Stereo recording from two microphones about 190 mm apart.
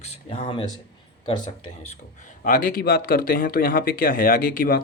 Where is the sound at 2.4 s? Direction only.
45° left (ahead or behind).